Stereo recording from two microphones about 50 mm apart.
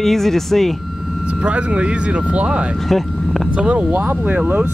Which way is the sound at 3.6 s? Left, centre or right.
Right.